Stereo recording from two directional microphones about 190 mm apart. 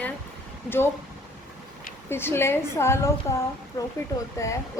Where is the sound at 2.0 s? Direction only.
10° left (ahead or behind).